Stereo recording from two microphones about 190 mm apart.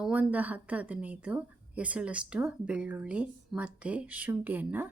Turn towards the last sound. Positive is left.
turn(degrees=-10)  # may be behind; listen again after turning